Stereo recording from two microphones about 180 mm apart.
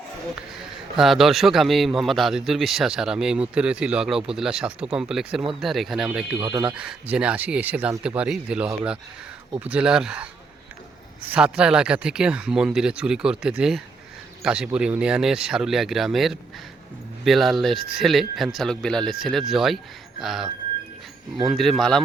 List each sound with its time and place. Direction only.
0.9 s speech: centre (ahead or behind)
6.4 s speech: 20° right (ahead or behind)
6.7 s speech: 5° right (ahead or behind)